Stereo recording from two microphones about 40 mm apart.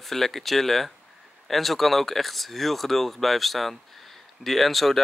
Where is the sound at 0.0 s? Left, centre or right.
Centre.